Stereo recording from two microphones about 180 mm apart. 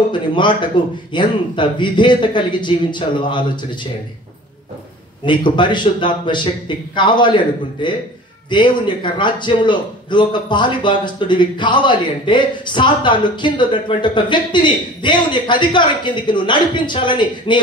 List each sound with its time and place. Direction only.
0.1 s a man's voice: 25° left (ahead or behind)
5.2 s a man's voice: 25° left (ahead or behind)